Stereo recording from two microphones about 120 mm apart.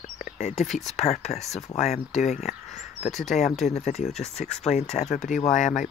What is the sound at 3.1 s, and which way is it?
Speech, centre (ahead or behind).